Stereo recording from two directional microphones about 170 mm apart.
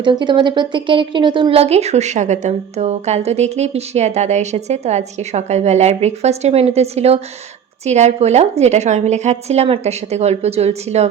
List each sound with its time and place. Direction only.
0.0 s speech: 25° right (ahead or behind)